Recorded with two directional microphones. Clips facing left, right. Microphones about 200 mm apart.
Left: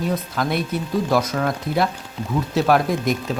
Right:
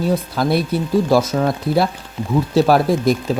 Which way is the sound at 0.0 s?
35° right (ahead or behind).